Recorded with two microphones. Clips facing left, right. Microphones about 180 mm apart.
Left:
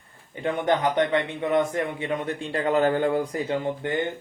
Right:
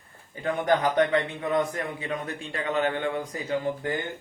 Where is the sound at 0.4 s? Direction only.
25° left (ahead or behind).